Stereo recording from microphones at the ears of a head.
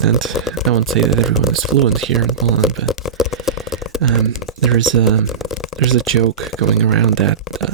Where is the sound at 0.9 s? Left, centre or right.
Right.